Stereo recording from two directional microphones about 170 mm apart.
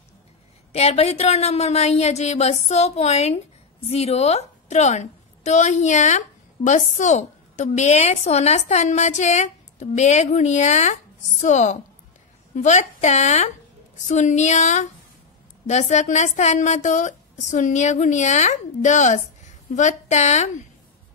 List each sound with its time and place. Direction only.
0.7 s a woman's voice: 40° left (ahead or behind)